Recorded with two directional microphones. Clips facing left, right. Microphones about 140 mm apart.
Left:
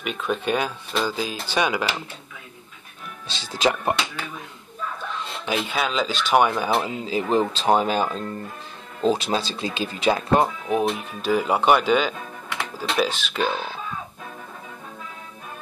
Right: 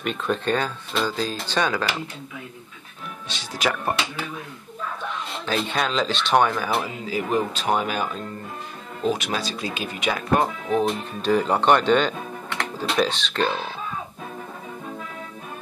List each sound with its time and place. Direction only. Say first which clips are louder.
0.0 s speech: right 1 dB; 5° left (ahead or behind)
3.3 s speech: left 3 dB; 25° left (ahead or behind)
5.4 s speech: even; 10° left (ahead or behind)
6.5 s speech: left 2 dB; 20° left (ahead or behind)
10.9 s speech: right 1 dB; 5° left (ahead or behind)